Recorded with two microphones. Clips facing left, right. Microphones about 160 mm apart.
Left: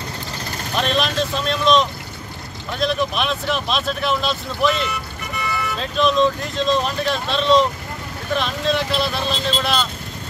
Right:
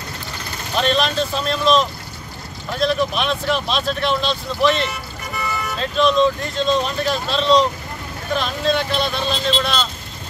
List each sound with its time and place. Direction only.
0.7 s speech: centre (ahead or behind)